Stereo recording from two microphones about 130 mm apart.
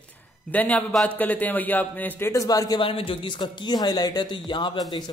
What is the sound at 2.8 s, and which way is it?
Speech, 45° left (ahead or behind).